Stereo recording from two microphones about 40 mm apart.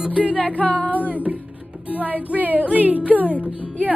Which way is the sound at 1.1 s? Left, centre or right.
Right.